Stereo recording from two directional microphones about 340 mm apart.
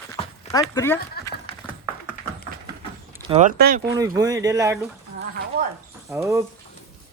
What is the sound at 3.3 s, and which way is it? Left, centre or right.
Speech, right.